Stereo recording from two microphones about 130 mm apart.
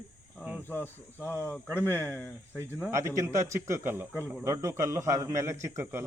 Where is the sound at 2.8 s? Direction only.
20° right (ahead or behind).